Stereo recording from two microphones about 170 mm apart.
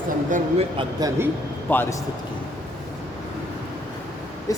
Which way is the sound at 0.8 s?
20° right (ahead or behind).